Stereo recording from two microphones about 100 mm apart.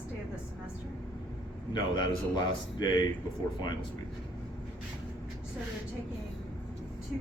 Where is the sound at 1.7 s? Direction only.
50° left (ahead or behind).